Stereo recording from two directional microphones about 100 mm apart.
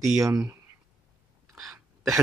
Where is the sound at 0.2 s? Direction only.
30° right (ahead or behind).